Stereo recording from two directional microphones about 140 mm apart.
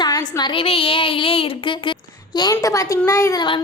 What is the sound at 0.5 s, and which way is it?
A woman's voice, 40° left (ahead or behind).